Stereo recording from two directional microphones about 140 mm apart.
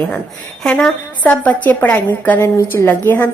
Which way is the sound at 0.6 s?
5° left (ahead or behind).